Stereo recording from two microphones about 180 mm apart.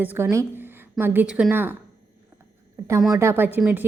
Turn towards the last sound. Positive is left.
turn(degrees=-10)  # may be behind; listen again after turning